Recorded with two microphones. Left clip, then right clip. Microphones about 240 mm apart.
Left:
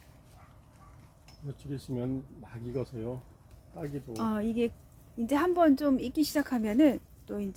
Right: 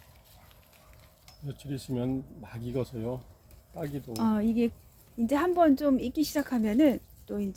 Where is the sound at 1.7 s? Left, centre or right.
Right.